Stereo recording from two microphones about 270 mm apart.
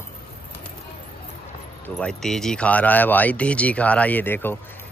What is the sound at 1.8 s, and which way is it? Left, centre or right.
Speech, centre.